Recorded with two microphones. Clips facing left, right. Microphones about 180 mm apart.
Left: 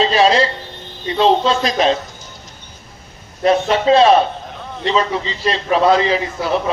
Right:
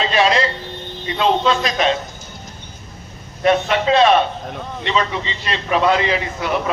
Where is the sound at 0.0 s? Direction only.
30° left (ahead or behind).